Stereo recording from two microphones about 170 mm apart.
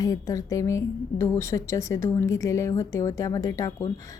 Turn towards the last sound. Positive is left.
turn(degrees=20)  # may be behind; listen again after turning